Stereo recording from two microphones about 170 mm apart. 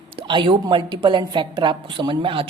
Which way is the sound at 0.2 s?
30° right (ahead or behind).